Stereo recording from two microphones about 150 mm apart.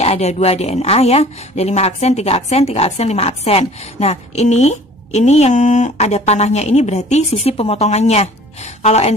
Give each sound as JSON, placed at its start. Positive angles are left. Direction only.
{"t": 0.0, "sound": "speech", "side_deg": 45}